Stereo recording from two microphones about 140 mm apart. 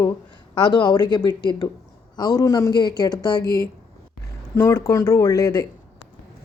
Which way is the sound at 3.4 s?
90° left.